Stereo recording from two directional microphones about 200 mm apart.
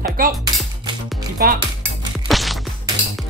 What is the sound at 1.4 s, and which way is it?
Speech, 45° right (ahead or behind).